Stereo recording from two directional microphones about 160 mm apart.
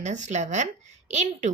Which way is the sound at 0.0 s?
50° right (ahead or behind).